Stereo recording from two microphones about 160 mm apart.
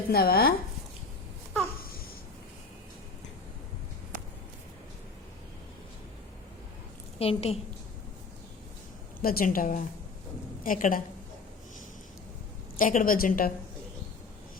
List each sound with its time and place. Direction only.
0.1 s speech: 75° left (ahead or behind)
7.2 s a woman's voice: 40° left (ahead or behind)
9.2 s a woman's voice: 65° left (ahead or behind)
12.7 s a woman's voice: 55° left (ahead or behind)